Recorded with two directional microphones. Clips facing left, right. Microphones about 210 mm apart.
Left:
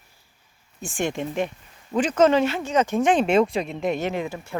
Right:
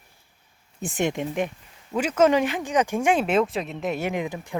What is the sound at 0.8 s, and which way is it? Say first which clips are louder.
Speech: right 1 dB; 20° right (ahead or behind).